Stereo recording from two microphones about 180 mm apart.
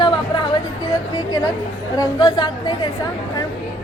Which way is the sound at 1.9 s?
20° left (ahead or behind).